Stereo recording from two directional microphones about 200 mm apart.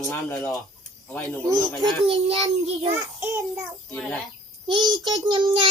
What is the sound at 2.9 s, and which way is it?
Child singing, 10° right (ahead or behind).